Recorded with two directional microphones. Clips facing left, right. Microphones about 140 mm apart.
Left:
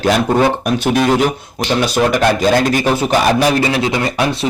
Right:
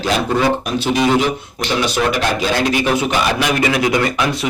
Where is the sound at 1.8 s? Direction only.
45° left (ahead or behind); by 4.3 s 30° left (ahead or behind).